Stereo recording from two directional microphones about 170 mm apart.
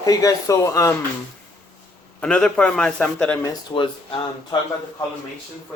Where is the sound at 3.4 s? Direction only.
30° left (ahead or behind).